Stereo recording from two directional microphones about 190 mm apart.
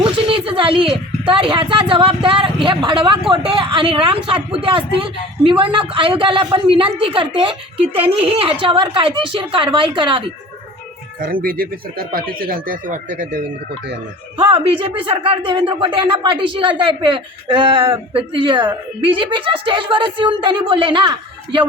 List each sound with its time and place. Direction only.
0.0 s a sound: 30° right (ahead or behind)
1.3 s a woman's voice: 25° right (ahead or behind)
11.2 s speech: 50° right (ahead or behind)
14.3 s a woman's voice: 25° right (ahead or behind)